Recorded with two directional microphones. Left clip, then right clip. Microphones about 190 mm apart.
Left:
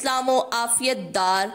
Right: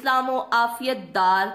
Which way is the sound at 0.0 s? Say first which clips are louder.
Left 1 dB; 40° left (ahead or behind).